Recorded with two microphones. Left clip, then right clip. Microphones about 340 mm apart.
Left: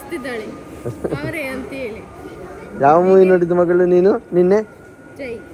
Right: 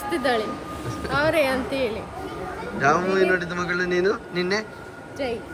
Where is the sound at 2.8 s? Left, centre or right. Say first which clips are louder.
Left 8 dB; centre.